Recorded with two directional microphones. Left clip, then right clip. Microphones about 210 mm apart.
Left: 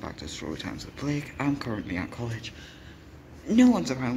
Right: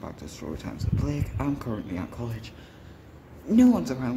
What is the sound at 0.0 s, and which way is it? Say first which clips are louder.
Speech: left 2 dB; centre (ahead or behind).